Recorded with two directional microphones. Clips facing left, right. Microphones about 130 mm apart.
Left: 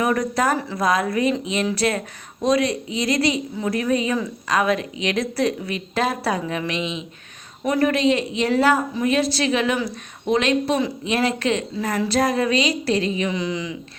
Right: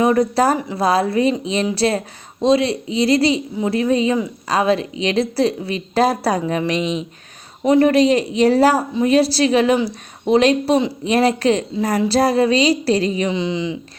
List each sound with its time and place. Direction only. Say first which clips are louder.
0.0 s a woman's voice: right 5 dB; 30° right (ahead or behind)
7.6 s a woman's voice: right 6 dB; 25° right (ahead or behind)
13.3 s a woman's voice: right 4 dB; 25° right (ahead or behind)